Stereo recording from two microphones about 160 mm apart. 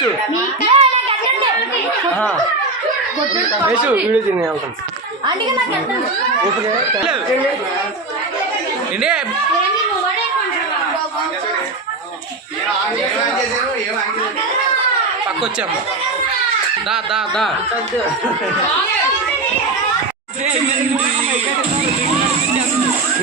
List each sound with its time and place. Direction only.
0.7 s a sound: 35° right (ahead or behind)
3.7 s speech: 10° right (ahead or behind)
9.0 s speech: 5° right (ahead or behind)
16.9 s speech: 5° right (ahead or behind)